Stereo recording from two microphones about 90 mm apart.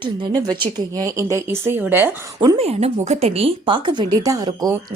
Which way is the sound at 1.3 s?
25° right (ahead or behind).